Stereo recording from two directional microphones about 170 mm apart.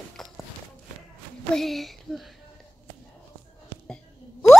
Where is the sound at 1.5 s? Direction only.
Centre (ahead or behind).